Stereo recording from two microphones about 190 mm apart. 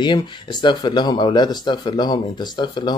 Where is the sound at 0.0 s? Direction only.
25° left (ahead or behind).